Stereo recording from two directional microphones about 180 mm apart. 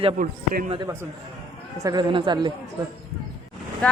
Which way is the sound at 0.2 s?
50° right (ahead or behind).